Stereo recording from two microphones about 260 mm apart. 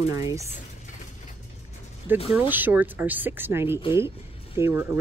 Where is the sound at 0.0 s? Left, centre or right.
Centre.